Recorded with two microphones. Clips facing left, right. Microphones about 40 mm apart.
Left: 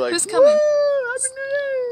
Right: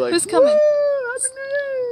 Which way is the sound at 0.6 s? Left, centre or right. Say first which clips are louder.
Right 1 dB; left.